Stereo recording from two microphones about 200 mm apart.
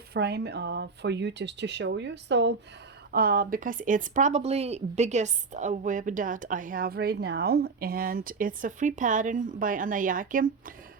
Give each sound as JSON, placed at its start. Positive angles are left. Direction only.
{"t": 0.1, "sound": "speech", "side_deg": -55}
{"t": 3.1, "sound": "speech", "side_deg": -50}